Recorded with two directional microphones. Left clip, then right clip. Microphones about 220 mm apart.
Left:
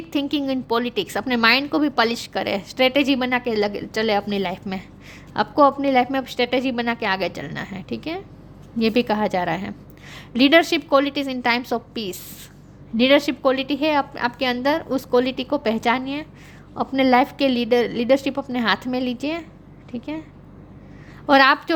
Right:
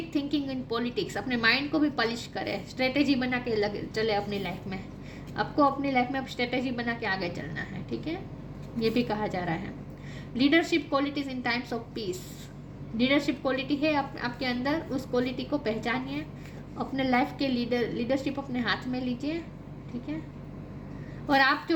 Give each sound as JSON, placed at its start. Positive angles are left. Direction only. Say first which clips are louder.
{"t": 0.1, "sound": "a woman's voice", "louder": "left 9 dB", "side_deg": 50}
{"t": 21.2, "sound": "a woman's voice", "louder": "left 9 dB", "side_deg": 50}